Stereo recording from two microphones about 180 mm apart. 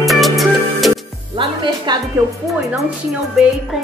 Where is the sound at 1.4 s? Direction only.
25° right (ahead or behind).